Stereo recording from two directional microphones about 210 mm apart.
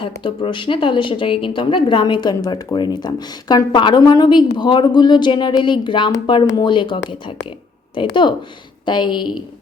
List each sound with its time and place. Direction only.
0.0 s speech: 25° left (ahead or behind)